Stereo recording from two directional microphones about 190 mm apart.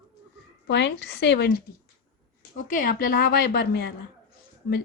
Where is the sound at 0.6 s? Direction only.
65° left (ahead or behind).